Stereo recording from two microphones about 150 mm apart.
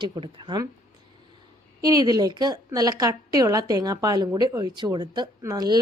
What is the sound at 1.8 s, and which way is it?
A woman's voice, 25° right (ahead or behind).